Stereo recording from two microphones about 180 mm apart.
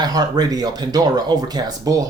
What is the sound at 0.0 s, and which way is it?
Speech, 20° right (ahead or behind).